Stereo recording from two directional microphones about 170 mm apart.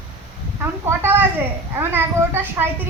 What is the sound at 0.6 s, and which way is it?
A child's voice, 15° right (ahead or behind).